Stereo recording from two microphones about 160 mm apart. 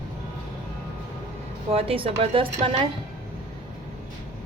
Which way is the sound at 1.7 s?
35° right (ahead or behind).